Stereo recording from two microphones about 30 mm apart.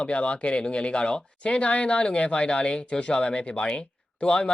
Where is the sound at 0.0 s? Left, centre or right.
Left.